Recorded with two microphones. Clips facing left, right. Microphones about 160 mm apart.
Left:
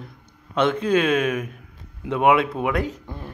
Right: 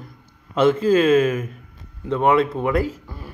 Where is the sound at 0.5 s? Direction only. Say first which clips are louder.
Right 4 dB; 5° right (ahead or behind).